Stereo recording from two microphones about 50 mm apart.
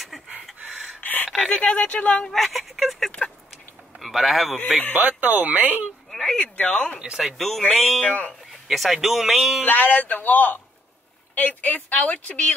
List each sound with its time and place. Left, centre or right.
0.1 s a sound: centre
1.0 s gasp: left
1.5 s speech: left
2.3 s a man's voice: centre
4.9 s speech: right
6.0 s a sound: centre
6.3 s speech: left
7.2 s speech: centre
8.0 s speech: left
8.6 s speech: centre
9.7 s speech: left